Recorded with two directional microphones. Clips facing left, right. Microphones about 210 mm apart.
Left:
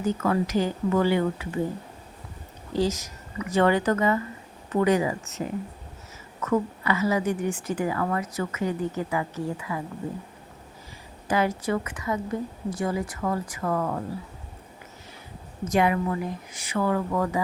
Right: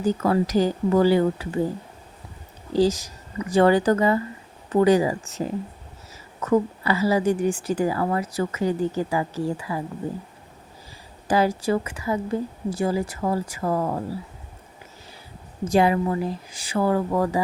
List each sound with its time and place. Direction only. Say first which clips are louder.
0.0 s speech: right 3 dB; 35° right (ahead or behind)
2.7 s speech: right 5 dB; 30° right (ahead or behind)
11.3 s a woman's voice: right 4 dB; 30° right (ahead or behind)
15.6 s speech: right 3 dB; 30° right (ahead or behind)